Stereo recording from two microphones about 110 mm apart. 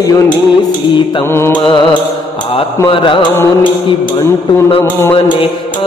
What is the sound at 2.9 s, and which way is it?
Mantra, 50° left (ahead or behind).